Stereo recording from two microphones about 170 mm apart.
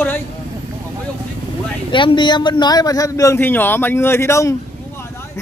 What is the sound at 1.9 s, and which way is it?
A man's voice, 25° left (ahead or behind).